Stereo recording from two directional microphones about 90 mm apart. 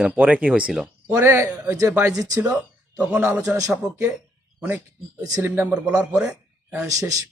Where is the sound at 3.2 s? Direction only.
35° right (ahead or behind).